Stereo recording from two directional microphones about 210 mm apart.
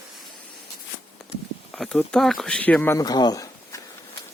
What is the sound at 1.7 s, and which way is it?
Speech, centre (ahead or behind).